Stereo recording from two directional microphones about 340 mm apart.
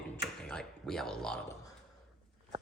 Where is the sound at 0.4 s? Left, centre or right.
Centre.